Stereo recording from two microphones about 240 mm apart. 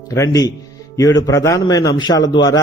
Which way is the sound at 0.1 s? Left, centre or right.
Centre.